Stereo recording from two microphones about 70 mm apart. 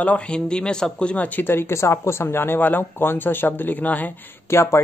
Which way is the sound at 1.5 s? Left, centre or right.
Left.